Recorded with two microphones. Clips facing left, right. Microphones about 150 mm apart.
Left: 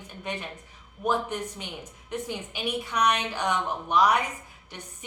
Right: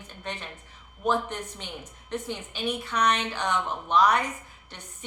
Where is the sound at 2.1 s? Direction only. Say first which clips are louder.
Even; 10° left (ahead or behind).